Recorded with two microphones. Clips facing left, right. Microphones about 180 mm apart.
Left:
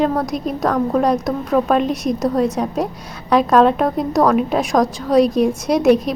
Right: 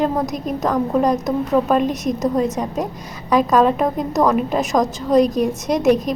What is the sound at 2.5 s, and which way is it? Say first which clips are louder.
A woman's voice: left 2 dB; centre (ahead or behind).